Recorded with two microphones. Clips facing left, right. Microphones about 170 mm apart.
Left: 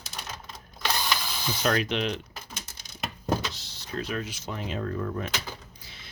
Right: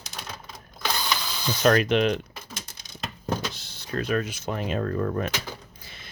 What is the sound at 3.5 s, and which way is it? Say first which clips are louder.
Speech: right 4 dB; 55° right (ahead or behind).